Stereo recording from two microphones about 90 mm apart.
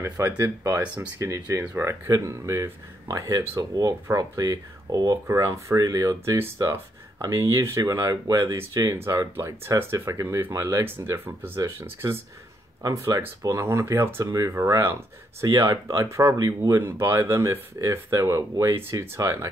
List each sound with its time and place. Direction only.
0.2 s speech: 35° right (ahead or behind)
1.6 s speech: 20° right (ahead or behind)
1.9 s speech: 40° right (ahead or behind)
5.2 s speech: 30° right (ahead or behind)